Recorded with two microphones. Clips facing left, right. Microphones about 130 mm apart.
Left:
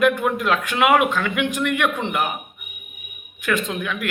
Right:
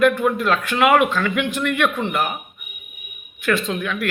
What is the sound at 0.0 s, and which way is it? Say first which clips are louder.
A man's voice: right 2 dB; 15° left (ahead or behind).